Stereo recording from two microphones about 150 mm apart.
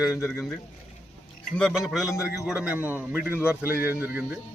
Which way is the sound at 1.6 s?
Centre (ahead or behind).